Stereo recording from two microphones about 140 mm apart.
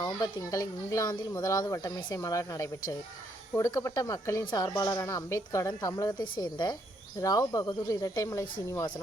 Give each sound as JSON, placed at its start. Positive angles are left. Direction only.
{"t": 0.0, "sound": "speech", "side_deg": 25}